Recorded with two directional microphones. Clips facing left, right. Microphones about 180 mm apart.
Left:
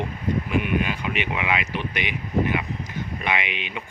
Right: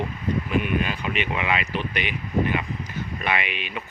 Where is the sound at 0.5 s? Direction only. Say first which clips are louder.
Even; 10° left (ahead or behind).